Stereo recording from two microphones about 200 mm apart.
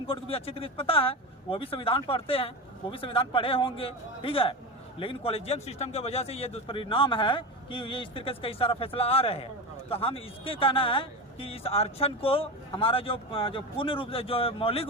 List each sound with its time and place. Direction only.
0.1 s speech: 30° left (ahead or behind)